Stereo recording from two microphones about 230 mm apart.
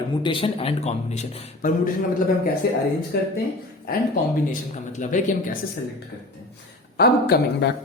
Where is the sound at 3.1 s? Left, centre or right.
Left.